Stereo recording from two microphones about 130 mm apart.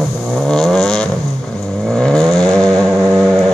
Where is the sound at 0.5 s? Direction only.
Centre (ahead or behind).